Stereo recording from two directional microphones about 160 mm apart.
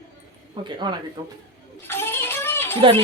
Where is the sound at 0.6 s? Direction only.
30° right (ahead or behind).